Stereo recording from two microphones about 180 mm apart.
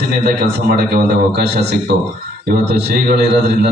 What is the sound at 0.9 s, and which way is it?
A man's voice, 65° right (ahead or behind).